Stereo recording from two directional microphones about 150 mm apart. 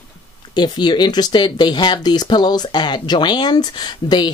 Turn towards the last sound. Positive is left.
turn(degrees=30)  # may be behind; listen again after turning